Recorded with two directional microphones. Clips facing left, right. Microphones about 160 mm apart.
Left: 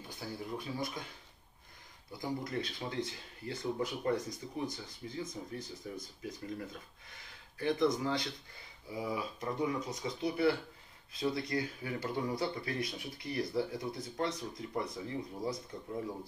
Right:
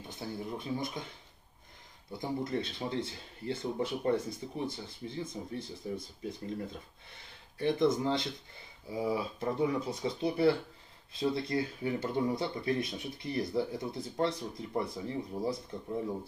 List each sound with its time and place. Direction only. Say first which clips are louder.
0.1 s speech: right 2 dB; 20° right (ahead or behind)
2.1 s speech: right 3 dB; 25° right (ahead or behind)
7.5 s speech: right 3 dB; 25° right (ahead or behind)